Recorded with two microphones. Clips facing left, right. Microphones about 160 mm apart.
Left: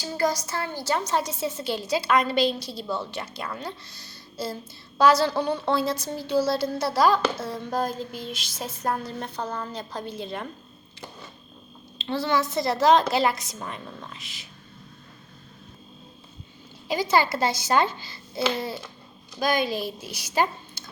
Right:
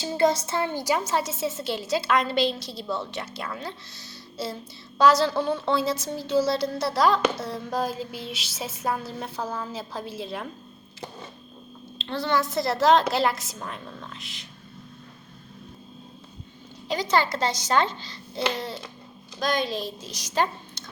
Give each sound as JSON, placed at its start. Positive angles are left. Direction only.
{"t": 0.0, "sound": "a woman's voice", "side_deg": -25}
{"t": 0.9, "sound": "a woman's voice", "side_deg": -5}
{"t": 11.9, "sound": "a woman's voice", "side_deg": 0}
{"t": 16.9, "sound": "a child's voice", "side_deg": 5}